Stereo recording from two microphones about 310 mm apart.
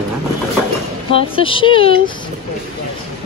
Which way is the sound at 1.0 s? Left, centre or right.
Centre.